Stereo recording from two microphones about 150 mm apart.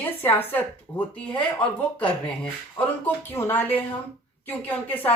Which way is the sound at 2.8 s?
15° left (ahead or behind).